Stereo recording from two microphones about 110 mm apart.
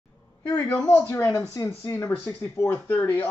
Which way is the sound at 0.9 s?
20° left (ahead or behind).